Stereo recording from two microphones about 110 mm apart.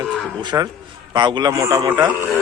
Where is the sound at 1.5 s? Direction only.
30° right (ahead or behind).